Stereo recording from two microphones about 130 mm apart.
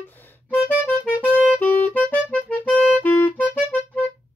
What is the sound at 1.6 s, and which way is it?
Clarinet, 15° left (ahead or behind).